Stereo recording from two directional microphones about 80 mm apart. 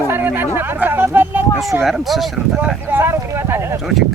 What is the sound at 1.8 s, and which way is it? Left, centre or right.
Speech, centre.